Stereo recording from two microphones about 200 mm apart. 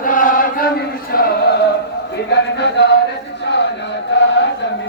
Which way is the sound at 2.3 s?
60° left (ahead or behind).